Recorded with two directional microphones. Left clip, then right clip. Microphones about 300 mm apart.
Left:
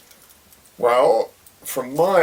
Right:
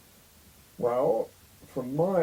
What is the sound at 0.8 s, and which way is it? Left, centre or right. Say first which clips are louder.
Speech: left 10 dB; centre.